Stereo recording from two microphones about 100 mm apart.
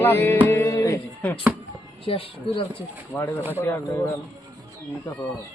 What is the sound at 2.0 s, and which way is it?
Speech, 70° left (ahead or behind).